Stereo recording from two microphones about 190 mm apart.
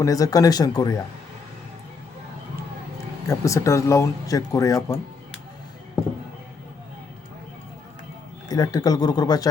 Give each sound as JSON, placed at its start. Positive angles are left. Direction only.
{"t": 0.0, "sound": "speech", "side_deg": 20}
{"t": 3.2, "sound": "speech", "side_deg": 15}
{"t": 8.4, "sound": "speech", "side_deg": 20}